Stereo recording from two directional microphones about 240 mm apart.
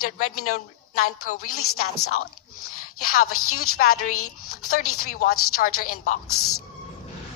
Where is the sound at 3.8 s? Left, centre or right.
Left.